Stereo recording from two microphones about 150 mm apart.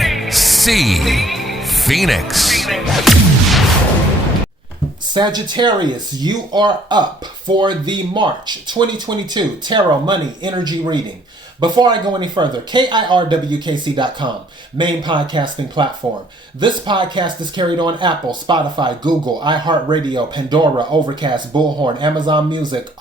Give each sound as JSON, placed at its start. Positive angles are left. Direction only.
{"t": 0.0, "sound": "music", "side_deg": 0}
{"t": 5.1, "sound": "speech", "side_deg": -30}